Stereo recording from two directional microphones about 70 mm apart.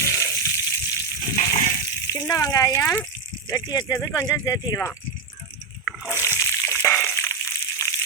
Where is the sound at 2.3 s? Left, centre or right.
Left.